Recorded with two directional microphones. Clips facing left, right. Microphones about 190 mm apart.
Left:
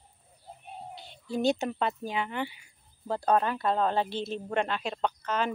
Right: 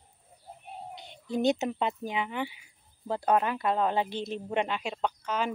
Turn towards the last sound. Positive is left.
turn(degrees=-10)  # may be behind; listen again after turning